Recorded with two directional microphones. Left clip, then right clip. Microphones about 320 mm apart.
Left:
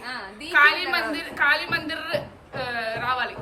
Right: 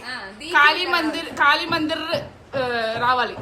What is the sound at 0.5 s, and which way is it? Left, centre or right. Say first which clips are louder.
A woman's voice: right 2 dB; centre.